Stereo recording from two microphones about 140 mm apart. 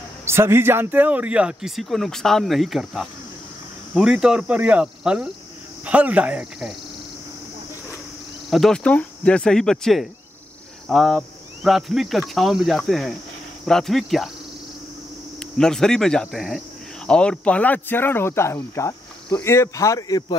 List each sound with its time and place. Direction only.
0.2 s speech: 20° right (ahead or behind)
8.5 s speech: centre (ahead or behind)
15.5 s speech: 5° left (ahead or behind); by 20.3 s 30° left (ahead or behind)